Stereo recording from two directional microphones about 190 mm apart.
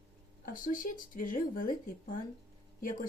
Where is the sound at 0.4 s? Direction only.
45° left (ahead or behind).